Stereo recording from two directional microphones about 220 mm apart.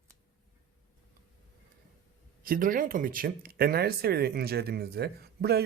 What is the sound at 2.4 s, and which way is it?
Speech, 40° right (ahead or behind).